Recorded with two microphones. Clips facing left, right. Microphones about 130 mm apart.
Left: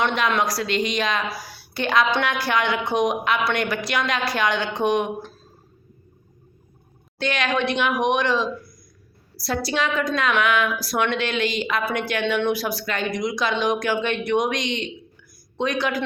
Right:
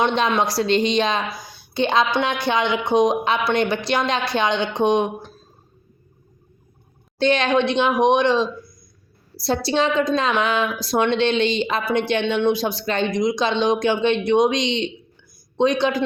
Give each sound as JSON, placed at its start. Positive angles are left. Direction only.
{"t": 0.0, "sound": "speech", "side_deg": -25}
{"t": 7.2, "sound": "speech", "side_deg": -30}